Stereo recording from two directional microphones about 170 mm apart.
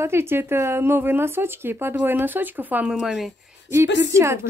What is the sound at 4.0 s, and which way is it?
Speech, 15° right (ahead or behind).